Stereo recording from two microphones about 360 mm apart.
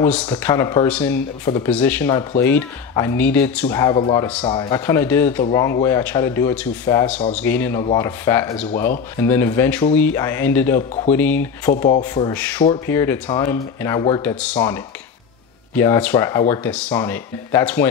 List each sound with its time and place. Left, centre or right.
0.0 s speech: centre
8.7 s speech: left
9.2 s speech: centre